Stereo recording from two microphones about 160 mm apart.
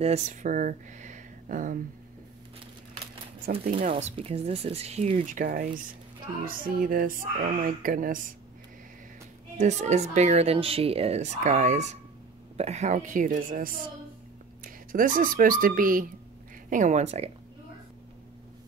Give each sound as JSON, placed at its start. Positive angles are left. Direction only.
{"t": 0.0, "sound": "speech", "side_deg": -45}
{"t": 3.6, "sound": "speech", "side_deg": -55}
{"t": 4.0, "sound": "speech", "side_deg": -40}
{"t": 9.6, "sound": "speech", "side_deg": -45}
{"t": 16.7, "sound": "speech", "side_deg": -50}